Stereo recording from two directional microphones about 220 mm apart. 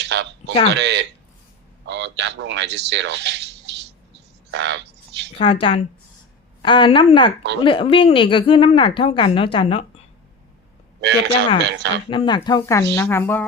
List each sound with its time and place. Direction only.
0.0 s a sound: 50° right (ahead or behind)
0.7 s speech: 50° right (ahead or behind)
4.5 s a sound: 50° right (ahead or behind)
5.3 s speech: 25° left (ahead or behind)
11.0 s speech: 50° right (ahead or behind)
12.0 s a woman's voice: 20° left (ahead or behind)